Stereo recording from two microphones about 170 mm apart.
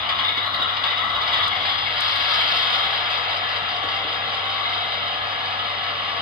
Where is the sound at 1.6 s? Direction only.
30° right (ahead or behind).